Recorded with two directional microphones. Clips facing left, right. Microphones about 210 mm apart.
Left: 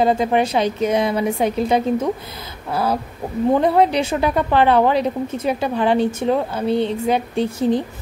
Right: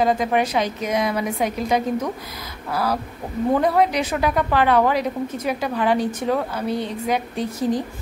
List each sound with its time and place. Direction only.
0.0 s a woman's voice: 30° left (ahead or behind)